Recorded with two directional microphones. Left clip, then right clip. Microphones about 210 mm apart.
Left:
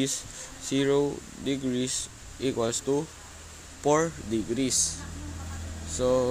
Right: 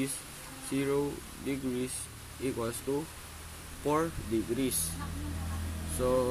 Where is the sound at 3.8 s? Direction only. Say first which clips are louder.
Left 6 dB; 20° left (ahead or behind).